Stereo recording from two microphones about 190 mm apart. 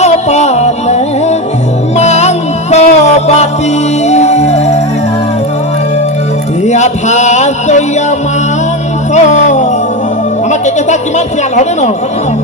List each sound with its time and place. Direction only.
0.0 s music: 35° left (ahead or behind)
6.7 s a sound: 40° left (ahead or behind)
9.1 s music: 40° left (ahead or behind)